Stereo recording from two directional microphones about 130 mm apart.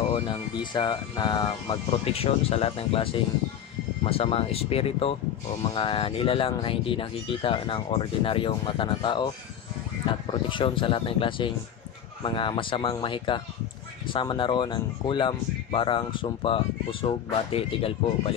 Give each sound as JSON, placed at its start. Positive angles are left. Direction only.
{"t": 0.1, "sound": "speech", "side_deg": 40}
{"t": 1.9, "sound": "speech", "side_deg": 50}
{"t": 10.1, "sound": "a sound", "side_deg": 40}
{"t": 10.5, "sound": "speech", "side_deg": 40}